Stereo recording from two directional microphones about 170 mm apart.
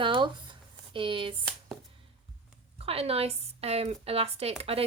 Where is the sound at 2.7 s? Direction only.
35° right (ahead or behind).